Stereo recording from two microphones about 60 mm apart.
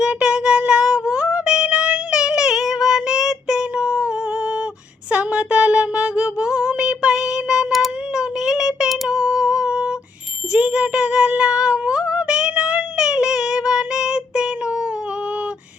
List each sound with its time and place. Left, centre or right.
0.0 s music: centre
5.1 s a sound: centre
8.1 s child singing: centre
9.0 s music: centre